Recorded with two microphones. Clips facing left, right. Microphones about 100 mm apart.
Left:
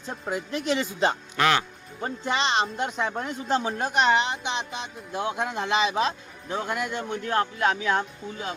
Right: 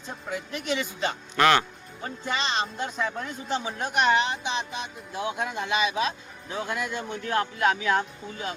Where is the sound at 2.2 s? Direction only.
20° left (ahead or behind).